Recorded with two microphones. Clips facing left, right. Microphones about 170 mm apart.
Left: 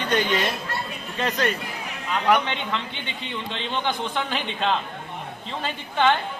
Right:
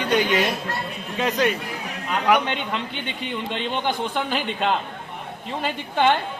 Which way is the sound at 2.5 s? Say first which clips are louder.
Right 2 dB; 50° right (ahead or behind).